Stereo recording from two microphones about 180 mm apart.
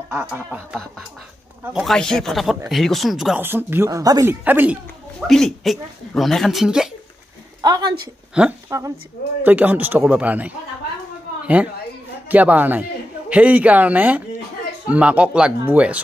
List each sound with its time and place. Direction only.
0.1 s speech: 10° right (ahead or behind)
5.3 s speech: centre (ahead or behind)
7.6 s a woman's voice: 20° right (ahead or behind)